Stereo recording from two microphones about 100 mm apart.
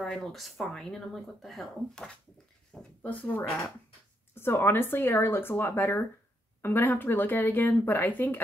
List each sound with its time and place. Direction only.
0.0 s speech: centre (ahead or behind)
2.7 s speech: 15° left (ahead or behind)